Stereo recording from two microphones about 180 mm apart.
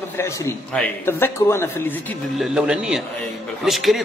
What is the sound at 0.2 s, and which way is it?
A man's voice, 15° left (ahead or behind).